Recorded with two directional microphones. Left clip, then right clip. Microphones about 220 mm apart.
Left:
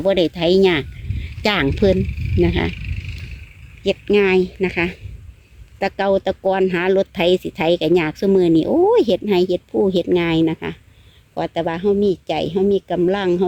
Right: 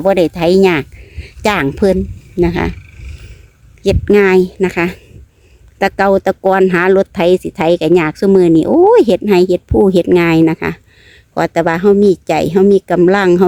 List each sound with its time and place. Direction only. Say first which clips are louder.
0.0 s speech: right 5 dB; 10° right (ahead or behind)
3.8 s speech: right 6 dB; 15° right (ahead or behind)